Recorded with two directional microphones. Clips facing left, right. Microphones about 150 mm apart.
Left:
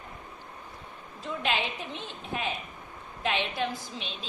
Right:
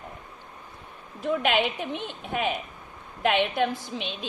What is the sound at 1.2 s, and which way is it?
A woman's voice, 60° right (ahead or behind).